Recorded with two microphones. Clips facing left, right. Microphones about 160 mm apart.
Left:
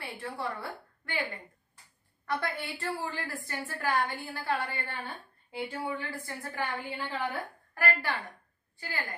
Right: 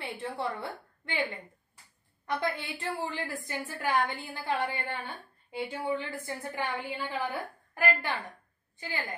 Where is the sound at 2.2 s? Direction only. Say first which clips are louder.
Right 1 dB; 20° right (ahead or behind).